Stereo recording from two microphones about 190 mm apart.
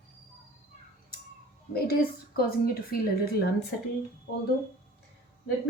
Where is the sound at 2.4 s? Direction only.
50° left (ahead or behind).